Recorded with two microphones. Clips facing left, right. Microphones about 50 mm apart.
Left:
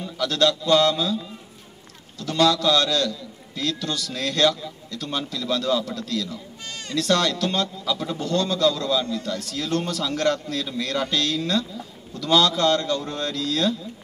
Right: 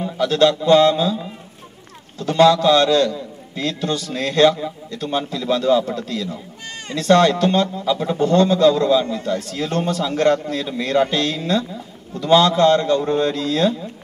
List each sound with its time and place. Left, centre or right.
0.0 s a man's voice: right